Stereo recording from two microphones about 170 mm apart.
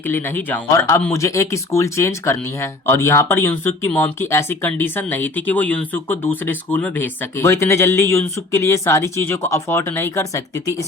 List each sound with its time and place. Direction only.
0.0 s speech: 15° left (ahead or behind)